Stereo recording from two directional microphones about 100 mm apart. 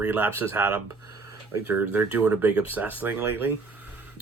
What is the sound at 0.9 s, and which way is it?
Speech, 30° right (ahead or behind).